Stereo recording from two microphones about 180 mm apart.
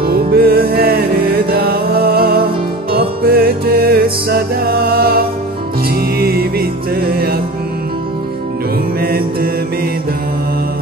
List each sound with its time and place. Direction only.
0.0 s music: 60° right (ahead or behind)
9.0 s mantra: 55° right (ahead or behind)